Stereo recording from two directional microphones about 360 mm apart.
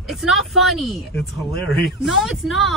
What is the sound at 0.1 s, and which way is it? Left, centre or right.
Speech, centre.